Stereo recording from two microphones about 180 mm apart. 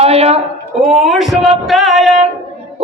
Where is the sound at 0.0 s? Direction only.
35° right (ahead or behind).